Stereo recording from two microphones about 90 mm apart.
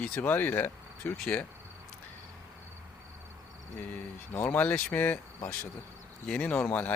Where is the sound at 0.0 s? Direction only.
15° left (ahead or behind).